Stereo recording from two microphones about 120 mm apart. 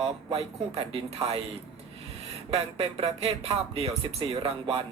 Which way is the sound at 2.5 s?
50° right (ahead or behind).